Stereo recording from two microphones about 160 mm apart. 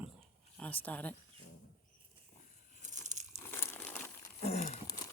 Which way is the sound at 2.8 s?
50° right (ahead or behind).